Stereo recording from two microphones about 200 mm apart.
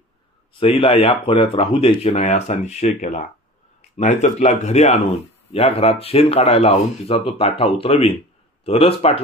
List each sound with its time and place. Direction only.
0.6 s speech: 30° left (ahead or behind)